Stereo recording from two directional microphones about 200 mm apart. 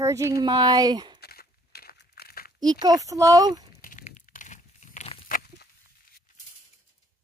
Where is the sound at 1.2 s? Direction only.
50° left (ahead or behind).